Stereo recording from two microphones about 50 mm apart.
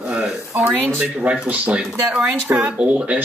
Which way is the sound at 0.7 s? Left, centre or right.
Right.